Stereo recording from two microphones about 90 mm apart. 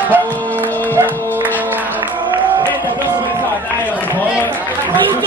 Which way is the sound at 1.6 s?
20° right (ahead or behind).